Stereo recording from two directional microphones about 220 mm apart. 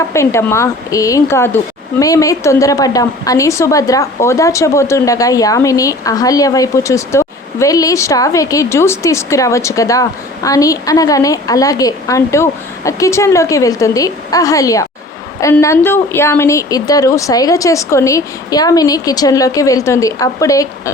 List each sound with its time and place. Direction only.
0.1 s speech: 15° left (ahead or behind)